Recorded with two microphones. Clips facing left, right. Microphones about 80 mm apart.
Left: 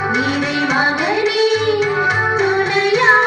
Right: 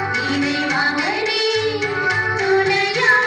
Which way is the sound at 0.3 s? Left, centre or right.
Left.